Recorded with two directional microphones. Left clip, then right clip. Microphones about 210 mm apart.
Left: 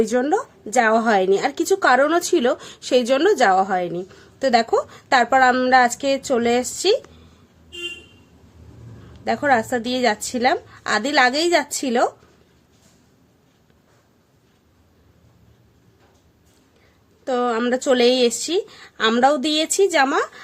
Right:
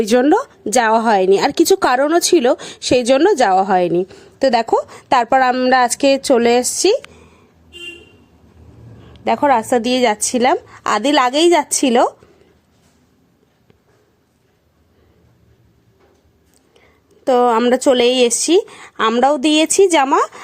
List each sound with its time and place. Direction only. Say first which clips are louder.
0.0 s a woman's voice: right 6 dB; 40° right (ahead or behind)
9.2 s a woman's voice: right 4 dB; 30° right (ahead or behind)
17.2 s a woman's voice: right 8 dB; 30° right (ahead or behind)